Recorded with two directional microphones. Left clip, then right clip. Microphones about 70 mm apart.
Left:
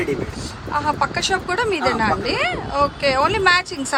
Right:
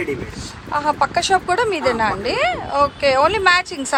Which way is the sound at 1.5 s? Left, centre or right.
Left.